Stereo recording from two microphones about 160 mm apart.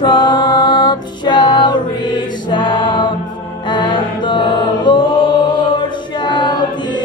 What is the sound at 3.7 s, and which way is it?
Chant, 30° left (ahead or behind).